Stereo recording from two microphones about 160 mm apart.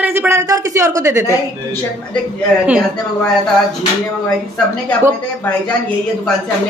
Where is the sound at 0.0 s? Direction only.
10° right (ahead or behind).